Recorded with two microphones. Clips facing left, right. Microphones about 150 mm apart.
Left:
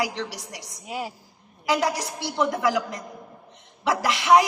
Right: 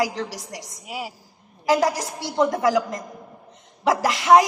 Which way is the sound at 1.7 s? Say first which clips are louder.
Right 4 dB; 40° right (ahead or behind).